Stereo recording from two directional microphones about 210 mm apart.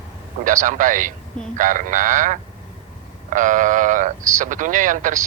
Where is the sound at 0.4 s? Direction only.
40° right (ahead or behind).